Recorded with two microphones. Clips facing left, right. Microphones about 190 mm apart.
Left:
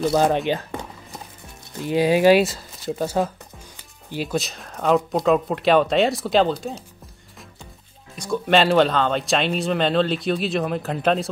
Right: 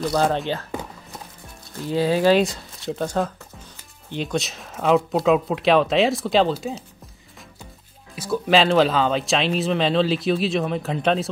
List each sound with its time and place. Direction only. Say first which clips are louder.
0.1 s speech: left 2 dB; 15° left (ahead or behind)
1.9 s speech: left 2 dB; 15° left (ahead or behind); by 6.7 s centre (ahead or behind)
8.2 s speech: even; centre (ahead or behind)